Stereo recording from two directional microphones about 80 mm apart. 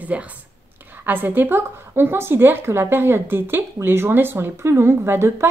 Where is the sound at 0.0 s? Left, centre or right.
Centre.